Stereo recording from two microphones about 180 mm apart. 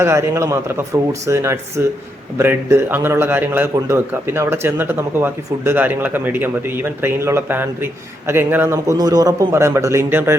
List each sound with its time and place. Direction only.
0.0 s a man's voice: 15° right (ahead or behind)